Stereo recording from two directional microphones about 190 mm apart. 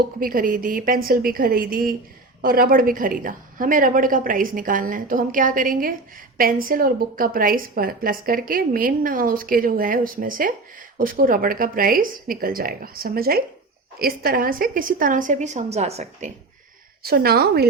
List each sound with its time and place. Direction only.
0.2 s a woman's voice: 45° right (ahead or behind)
17.0 s a woman's voice: 55° right (ahead or behind)